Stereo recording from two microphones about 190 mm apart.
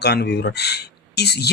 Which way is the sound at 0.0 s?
60° left (ahead or behind).